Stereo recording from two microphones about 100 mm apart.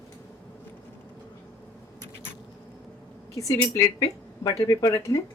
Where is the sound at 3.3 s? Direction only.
35° left (ahead or behind).